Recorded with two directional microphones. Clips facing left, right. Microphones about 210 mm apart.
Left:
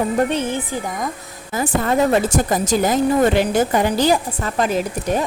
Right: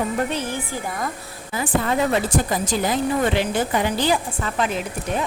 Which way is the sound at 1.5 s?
45° left (ahead or behind).